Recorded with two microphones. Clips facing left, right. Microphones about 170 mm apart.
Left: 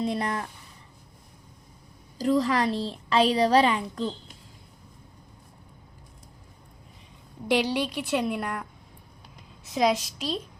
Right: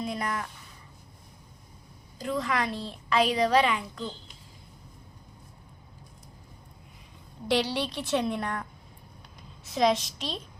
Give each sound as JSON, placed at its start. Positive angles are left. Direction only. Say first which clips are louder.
{"t": 0.0, "sound": "a woman's voice", "louder": "left 4 dB", "side_deg": 30}
{"t": 2.1, "sound": "a woman's voice", "louder": "left 6 dB", "side_deg": 35}
{"t": 7.4, "sound": "a woman's voice", "louder": "left 2 dB", "side_deg": 15}
{"t": 9.7, "sound": "a woman's voice", "louder": "left 1 dB", "side_deg": 10}